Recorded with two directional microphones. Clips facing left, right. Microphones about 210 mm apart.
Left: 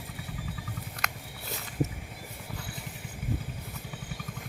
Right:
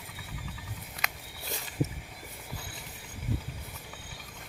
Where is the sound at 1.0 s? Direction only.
Centre (ahead or behind).